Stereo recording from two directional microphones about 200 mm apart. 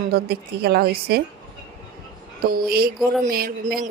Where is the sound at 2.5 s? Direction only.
50° right (ahead or behind).